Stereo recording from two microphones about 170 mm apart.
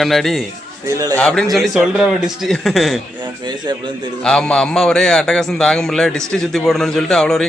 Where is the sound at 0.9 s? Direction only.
20° right (ahead or behind).